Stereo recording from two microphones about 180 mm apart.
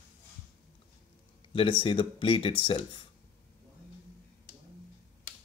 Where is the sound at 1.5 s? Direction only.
30° left (ahead or behind).